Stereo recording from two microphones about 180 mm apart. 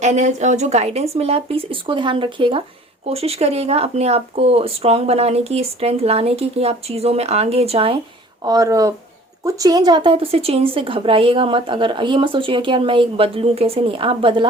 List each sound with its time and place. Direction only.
0.0 s speech: 40° right (ahead or behind)
8.4 s speech: 20° right (ahead or behind)